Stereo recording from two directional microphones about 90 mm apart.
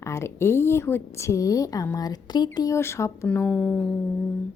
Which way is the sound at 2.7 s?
30° left (ahead or behind).